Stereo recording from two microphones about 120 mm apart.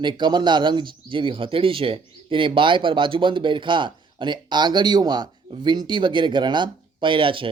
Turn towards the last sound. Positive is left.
turn(degrees=-45)  # may be behind; listen again after turning